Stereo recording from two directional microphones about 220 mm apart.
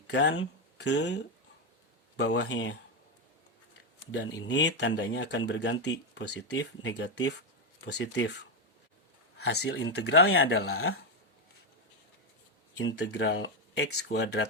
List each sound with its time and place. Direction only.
0.1 s speech: 50° left (ahead or behind)
4.1 s speech: 55° left (ahead or behind)
6.2 s speech: 70° left (ahead or behind); by 8.3 s 50° left (ahead or behind)
9.5 s speech: 50° left (ahead or behind)
12.8 s speech: 55° left (ahead or behind)